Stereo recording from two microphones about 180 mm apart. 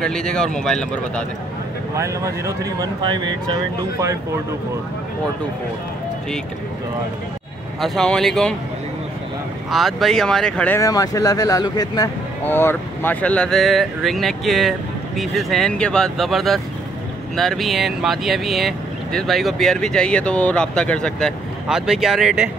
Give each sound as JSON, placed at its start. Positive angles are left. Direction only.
{"t": 0.0, "sound": "speech", "side_deg": 5}
{"t": 2.0, "sound": "speech", "side_deg": -15}
{"t": 7.8, "sound": "speech", "side_deg": 0}
{"t": 9.7, "sound": "speech", "side_deg": 0}
{"t": 10.8, "sound": "speech", "side_deg": 20}
{"t": 12.4, "sound": "speech", "side_deg": 10}